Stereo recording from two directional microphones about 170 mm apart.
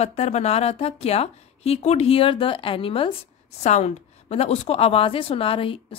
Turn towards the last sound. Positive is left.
turn(degrees=30)  # may be behind; listen again after turning